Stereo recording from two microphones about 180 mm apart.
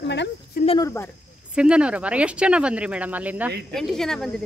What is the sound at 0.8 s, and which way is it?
Speech, 15° left (ahead or behind).